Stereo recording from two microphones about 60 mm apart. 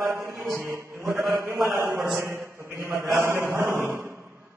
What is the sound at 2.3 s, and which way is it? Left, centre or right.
A man's voice, right.